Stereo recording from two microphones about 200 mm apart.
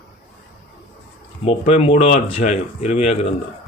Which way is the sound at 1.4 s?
30° left (ahead or behind).